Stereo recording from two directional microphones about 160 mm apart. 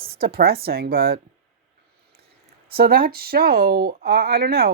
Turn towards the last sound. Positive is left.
turn(degrees=-75)  # may be behind; listen again after turning